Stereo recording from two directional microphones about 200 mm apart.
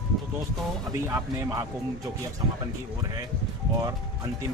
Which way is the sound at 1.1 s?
15° right (ahead or behind).